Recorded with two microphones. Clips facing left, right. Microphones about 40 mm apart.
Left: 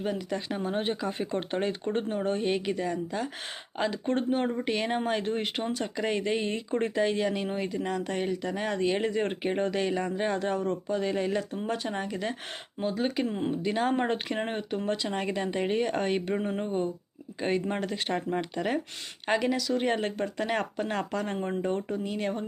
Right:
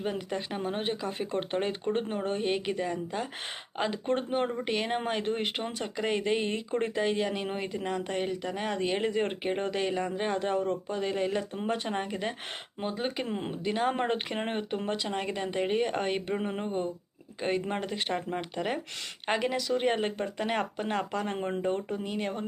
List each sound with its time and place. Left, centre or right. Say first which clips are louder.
0.0 s speech: left 1 dB; right; by 11.4 s centre
11.5 s speech: even; right
13.0 s speech: left 4 dB; centre
14.8 s speech: left 2 dB; centre